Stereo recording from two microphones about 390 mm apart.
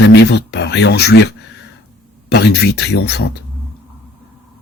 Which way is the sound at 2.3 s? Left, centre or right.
Left.